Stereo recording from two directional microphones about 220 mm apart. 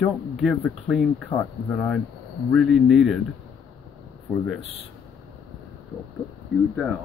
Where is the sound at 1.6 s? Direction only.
5° left (ahead or behind).